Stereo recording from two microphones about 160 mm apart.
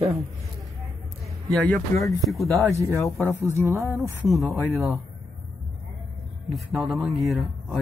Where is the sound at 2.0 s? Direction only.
20° left (ahead or behind).